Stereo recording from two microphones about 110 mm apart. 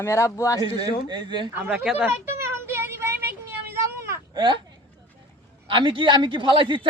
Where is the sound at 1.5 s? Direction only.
10° right (ahead or behind).